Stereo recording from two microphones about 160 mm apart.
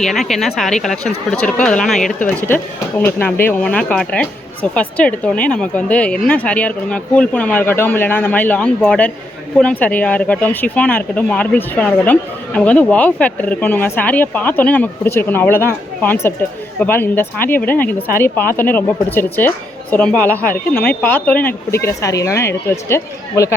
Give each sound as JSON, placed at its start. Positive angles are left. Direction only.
{"t": 0.0, "sound": "speech", "side_deg": 0}